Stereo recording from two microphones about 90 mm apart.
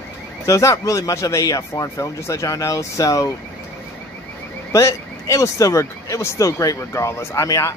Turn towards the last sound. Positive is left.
turn(degrees=35)  # may be behind; listen again after turning